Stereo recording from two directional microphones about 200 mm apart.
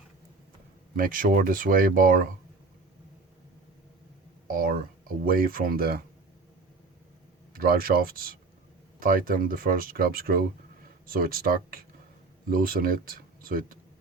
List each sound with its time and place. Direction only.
0.9 s speech: 45° right (ahead or behind)
4.4 s speech: 45° right (ahead or behind)
7.5 s speech: 50° right (ahead or behind)